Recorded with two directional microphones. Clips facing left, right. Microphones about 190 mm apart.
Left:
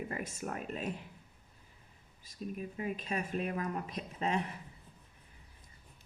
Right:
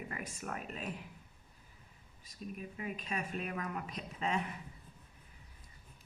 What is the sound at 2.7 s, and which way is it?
Speech, 35° left (ahead or behind).